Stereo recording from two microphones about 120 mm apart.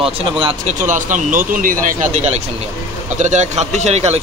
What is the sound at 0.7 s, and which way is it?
A man's voice, 90° right.